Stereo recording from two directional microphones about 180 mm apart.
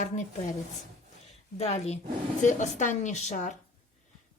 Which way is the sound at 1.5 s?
35° left (ahead or behind).